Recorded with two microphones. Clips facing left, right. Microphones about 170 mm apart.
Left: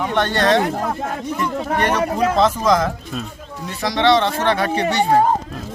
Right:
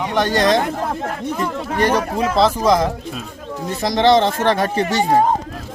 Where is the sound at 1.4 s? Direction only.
35° right (ahead or behind).